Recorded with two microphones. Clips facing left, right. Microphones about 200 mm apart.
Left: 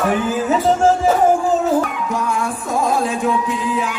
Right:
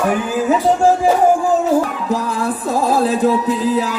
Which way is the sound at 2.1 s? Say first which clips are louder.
Right 2 dB; 35° right (ahead or behind).